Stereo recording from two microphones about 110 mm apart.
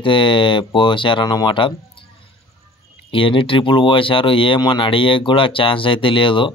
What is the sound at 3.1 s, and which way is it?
Speech, 55° left (ahead or behind).